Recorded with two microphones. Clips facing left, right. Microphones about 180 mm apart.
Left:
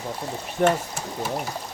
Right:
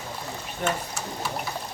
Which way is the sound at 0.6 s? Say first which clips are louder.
Left 7 dB; 55° left (ahead or behind).